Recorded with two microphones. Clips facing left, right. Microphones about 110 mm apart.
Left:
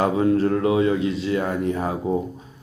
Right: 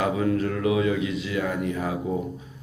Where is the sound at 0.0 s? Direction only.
35° left (ahead or behind).